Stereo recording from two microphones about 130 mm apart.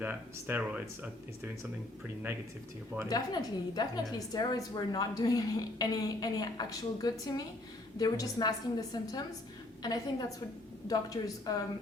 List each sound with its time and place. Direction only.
0.0 s speech: 15° right (ahead or behind)
3.1 s a woman's voice: 30° left (ahead or behind)